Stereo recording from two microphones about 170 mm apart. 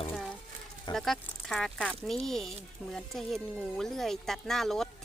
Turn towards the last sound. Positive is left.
turn(degrees=0)  # may be behind; listen again after turning